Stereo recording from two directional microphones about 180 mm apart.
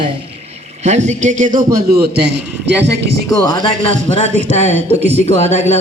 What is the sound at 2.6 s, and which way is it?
Speech, 75° right (ahead or behind).